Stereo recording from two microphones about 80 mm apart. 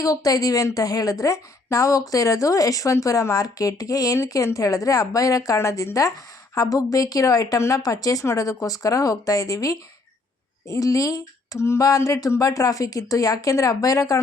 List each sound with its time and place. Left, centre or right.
0.0 s a woman's voice: left